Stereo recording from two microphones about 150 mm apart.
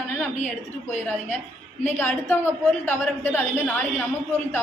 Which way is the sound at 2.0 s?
15° left (ahead or behind).